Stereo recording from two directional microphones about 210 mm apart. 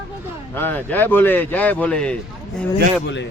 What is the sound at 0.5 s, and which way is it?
Speech, 10° left (ahead or behind).